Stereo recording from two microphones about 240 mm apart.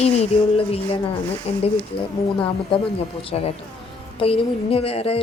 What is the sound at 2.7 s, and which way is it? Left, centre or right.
A woman's voice, left.